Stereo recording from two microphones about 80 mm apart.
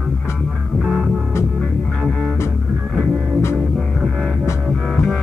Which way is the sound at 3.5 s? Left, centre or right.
Centre.